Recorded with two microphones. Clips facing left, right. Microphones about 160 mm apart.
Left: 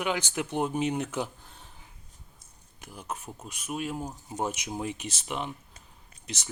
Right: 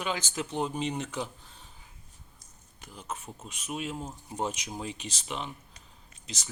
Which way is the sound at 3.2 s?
Centre (ahead or behind).